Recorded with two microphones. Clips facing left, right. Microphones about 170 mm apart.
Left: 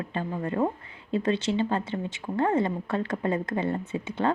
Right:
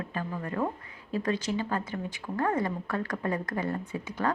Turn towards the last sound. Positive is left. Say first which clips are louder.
# left 4 dB
turn(degrees=25)  # may be behind; listen again after turning